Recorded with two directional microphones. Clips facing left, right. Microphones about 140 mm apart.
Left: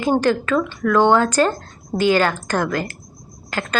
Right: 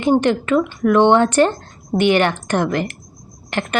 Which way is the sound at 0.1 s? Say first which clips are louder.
Right 3 dB; 20° right (ahead or behind).